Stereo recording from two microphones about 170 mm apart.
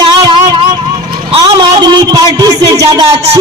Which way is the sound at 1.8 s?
25° right (ahead or behind).